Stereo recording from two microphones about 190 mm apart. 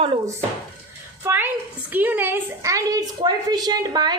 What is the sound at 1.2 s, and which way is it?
A woman's voice, 10° right (ahead or behind).